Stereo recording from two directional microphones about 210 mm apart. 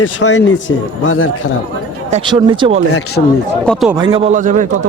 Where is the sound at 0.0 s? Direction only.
60° left (ahead or behind).